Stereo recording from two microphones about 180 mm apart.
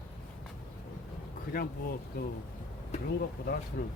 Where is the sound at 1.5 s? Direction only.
55° left (ahead or behind).